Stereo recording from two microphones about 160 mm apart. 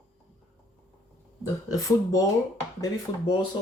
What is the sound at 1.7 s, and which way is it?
Speech, 20° left (ahead or behind).